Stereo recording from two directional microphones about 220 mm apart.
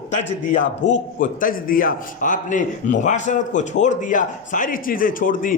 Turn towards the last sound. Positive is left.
turn(degrees=40)  # may be behind; listen again after turning